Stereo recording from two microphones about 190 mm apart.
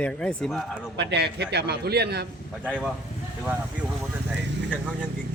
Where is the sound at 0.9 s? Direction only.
65° right (ahead or behind).